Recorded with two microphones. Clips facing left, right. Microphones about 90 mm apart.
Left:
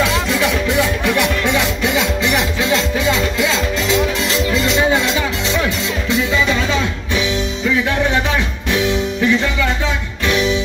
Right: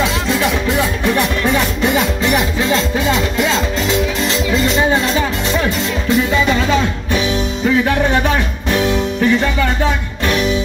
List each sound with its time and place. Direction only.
0.3 s music: 40° right (ahead or behind)
8.7 s music: 45° right (ahead or behind)